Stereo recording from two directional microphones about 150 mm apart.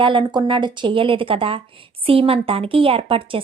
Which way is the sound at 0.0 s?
35° right (ahead or behind).